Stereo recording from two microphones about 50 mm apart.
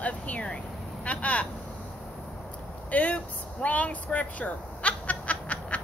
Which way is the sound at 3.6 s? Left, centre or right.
Left.